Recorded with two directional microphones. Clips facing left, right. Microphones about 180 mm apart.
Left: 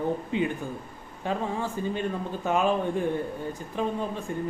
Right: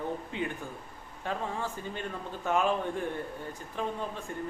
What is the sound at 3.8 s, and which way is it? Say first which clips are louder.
Speech: left 5 dB; 20° left (ahead or behind).